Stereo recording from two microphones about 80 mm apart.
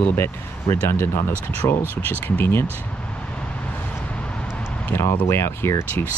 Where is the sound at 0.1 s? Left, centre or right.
Left.